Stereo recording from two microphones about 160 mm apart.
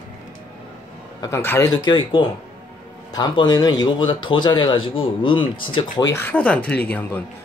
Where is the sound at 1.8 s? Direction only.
30° left (ahead or behind).